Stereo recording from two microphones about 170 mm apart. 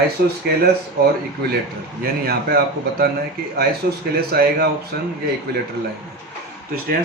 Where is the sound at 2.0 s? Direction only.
65° right (ahead or behind).